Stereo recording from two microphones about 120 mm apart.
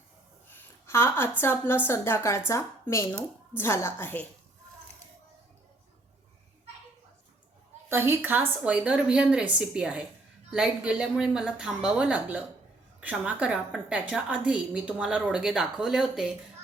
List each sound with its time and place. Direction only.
0.5 s a woman's voice: 20° left (ahead or behind)
7.9 s a woman's voice: 20° right (ahead or behind)